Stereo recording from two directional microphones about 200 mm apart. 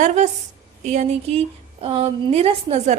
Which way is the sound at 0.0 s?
35° right (ahead or behind).